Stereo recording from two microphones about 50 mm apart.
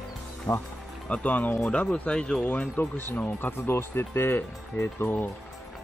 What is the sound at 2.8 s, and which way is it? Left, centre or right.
Speech, left.